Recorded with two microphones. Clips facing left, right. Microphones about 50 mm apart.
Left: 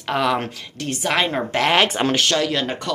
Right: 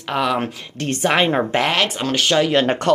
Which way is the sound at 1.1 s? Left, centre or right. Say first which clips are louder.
Right 3 dB; right.